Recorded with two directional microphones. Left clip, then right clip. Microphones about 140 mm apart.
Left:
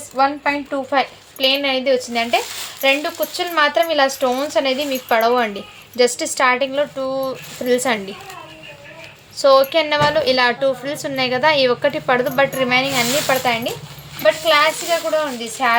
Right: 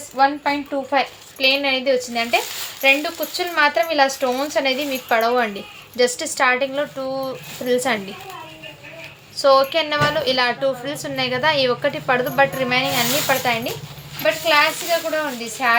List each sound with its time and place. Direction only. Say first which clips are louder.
0.2 s a woman's voice: even; 35° left (ahead or behind)
9.4 s a woman's voice: left 2 dB; 40° left (ahead or behind)